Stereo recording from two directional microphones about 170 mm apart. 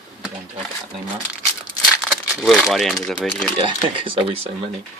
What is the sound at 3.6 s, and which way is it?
Speech, 30° right (ahead or behind).